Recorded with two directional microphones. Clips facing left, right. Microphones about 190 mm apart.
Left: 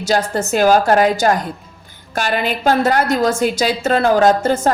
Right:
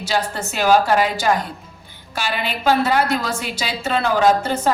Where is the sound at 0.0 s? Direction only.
45° left (ahead or behind).